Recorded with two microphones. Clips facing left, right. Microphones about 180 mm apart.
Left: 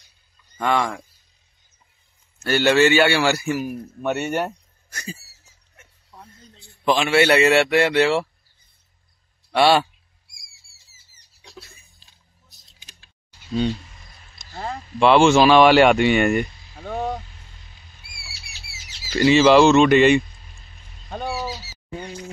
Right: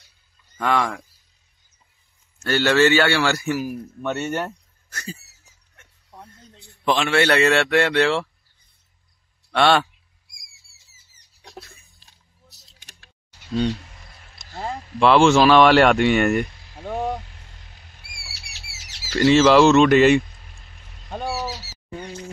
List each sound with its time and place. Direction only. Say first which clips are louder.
0.6 s speech: even; centre (ahead or behind)
2.4 s a man's voice: left 1 dB; 15° left (ahead or behind)
3.4 s speech: even; centre (ahead or behind)
4.0 s speech: left 2 dB; 10° left (ahead or behind)
6.7 s a man's voice: left 2 dB; centre (ahead or behind)
9.5 s a man's voice: left 1 dB; 5° left (ahead or behind)
11.6 s a sound: right 1 dB; centre (ahead or behind)
12.0 s music: right 3 dB; 75° right (ahead or behind)
12.7 s a sound: right 2 dB; 70° right (ahead or behind)
13.5 s speech: even; centre (ahead or behind)
17.8 s rodents: right 1 dB; 65° right (ahead or behind)
18.3 s a sound: even; 70° right (ahead or behind)
19.1 s speech: even; 5° left (ahead or behind)
21.8 s a sound: left 1 dB; 5° left (ahead or behind)